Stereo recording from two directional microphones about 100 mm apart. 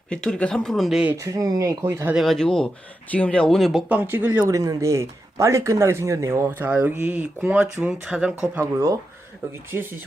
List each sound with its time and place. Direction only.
0.1 s speech: 10° left (ahead or behind)
1.1 s speech: 30° right (ahead or behind)
2.1 s speech: centre (ahead or behind)
3.8 s speech: 20° right (ahead or behind)
4.4 s speech: 35° right (ahead or behind); by 8.6 s 10° right (ahead or behind)